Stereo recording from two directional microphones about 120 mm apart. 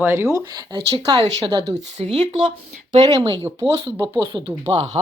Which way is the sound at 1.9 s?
55° right (ahead or behind).